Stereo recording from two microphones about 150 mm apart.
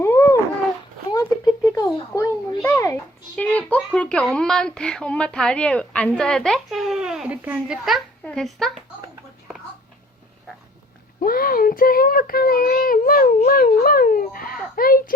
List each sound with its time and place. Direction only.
0.0 s dog: 20° left (ahead or behind)
1.1 s a sound: 20° left (ahead or behind)
2.6 s a child's voice: 15° left (ahead or behind)
11.2 s a child's voice: 75° left (ahead or behind)